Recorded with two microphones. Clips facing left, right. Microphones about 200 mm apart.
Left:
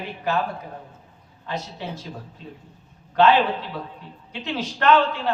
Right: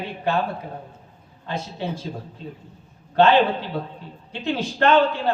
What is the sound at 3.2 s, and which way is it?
A man's voice, 30° right (ahead or behind).